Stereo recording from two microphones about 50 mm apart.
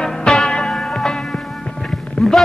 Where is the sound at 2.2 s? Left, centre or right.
Centre.